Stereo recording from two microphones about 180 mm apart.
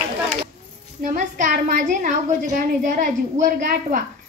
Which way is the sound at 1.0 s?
45° right (ahead or behind).